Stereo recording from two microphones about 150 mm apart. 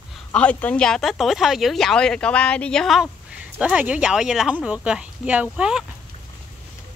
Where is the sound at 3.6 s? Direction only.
10° right (ahead or behind).